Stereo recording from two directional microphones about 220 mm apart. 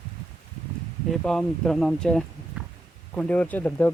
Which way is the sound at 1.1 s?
5° left (ahead or behind).